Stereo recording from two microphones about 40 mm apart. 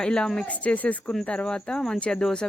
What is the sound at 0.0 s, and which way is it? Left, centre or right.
Speech, centre.